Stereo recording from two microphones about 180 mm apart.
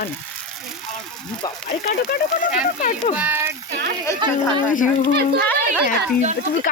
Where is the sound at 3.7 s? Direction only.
65° right (ahead or behind).